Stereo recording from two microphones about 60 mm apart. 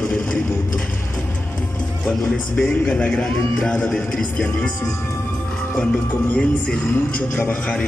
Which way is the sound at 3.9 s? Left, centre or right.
Centre.